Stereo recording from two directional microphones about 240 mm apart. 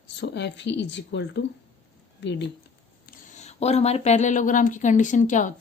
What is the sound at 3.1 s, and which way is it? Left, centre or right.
A woman's voice, left.